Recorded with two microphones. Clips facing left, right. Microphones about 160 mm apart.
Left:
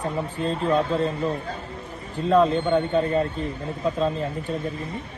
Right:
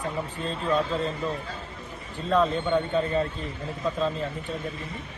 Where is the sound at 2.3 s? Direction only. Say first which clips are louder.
Left 4 dB; 30° left (ahead or behind).